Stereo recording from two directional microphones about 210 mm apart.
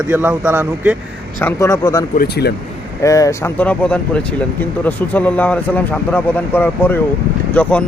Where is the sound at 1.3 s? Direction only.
15° left (ahead or behind).